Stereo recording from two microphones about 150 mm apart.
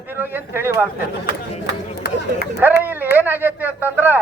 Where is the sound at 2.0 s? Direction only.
90° left.